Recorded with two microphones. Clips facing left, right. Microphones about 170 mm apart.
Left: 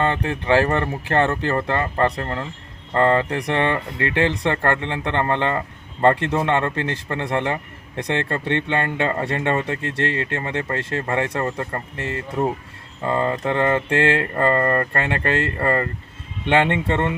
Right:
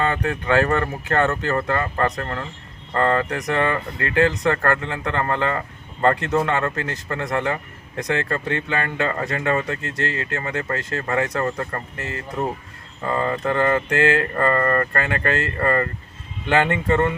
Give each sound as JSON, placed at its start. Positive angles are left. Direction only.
{"t": 0.1, "sound": "speech", "side_deg": 25}